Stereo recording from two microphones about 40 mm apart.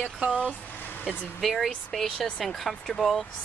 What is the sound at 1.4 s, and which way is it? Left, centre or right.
Speech, centre.